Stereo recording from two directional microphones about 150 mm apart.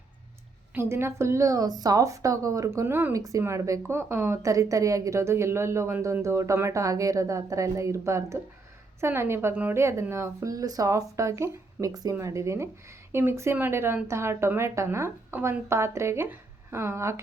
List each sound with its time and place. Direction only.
0.7 s a woman's voice: 15° right (ahead or behind)